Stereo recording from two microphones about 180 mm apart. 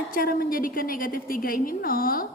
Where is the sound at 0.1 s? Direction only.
55° left (ahead or behind).